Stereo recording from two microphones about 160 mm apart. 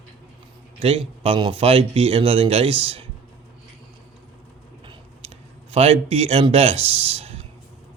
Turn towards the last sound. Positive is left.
turn(degrees=-40)  # may be behind; listen again after turning